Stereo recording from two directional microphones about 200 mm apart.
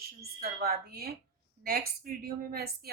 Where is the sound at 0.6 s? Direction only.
50° right (ahead or behind).